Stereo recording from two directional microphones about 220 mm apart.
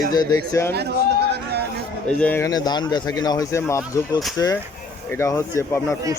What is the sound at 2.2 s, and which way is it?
Speech, 10° left (ahead or behind).